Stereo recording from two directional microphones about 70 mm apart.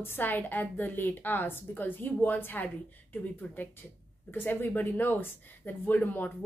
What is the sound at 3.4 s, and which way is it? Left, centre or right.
Speech, centre.